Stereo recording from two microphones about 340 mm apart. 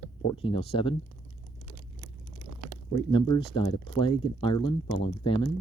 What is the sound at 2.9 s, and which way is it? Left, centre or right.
Speech, centre.